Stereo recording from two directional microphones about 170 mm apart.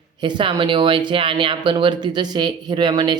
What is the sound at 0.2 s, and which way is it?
Speech, 30° right (ahead or behind).